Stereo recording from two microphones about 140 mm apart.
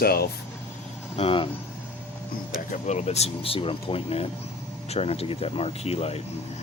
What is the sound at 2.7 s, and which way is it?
Speech, 55° left (ahead or behind).